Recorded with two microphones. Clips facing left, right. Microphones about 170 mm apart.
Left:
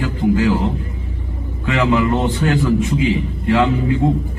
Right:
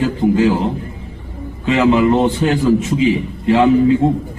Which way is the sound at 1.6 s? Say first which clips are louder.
Right 4 dB; 20° right (ahead or behind).